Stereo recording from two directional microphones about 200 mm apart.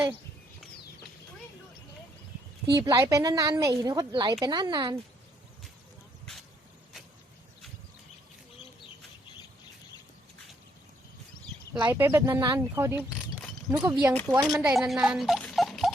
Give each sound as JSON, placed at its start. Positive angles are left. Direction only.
{"t": 2.7, "sound": "a woman's voice", "side_deg": -20}
{"t": 11.8, "sound": "speech", "side_deg": -10}
{"t": 14.4, "sound": "speech", "side_deg": 0}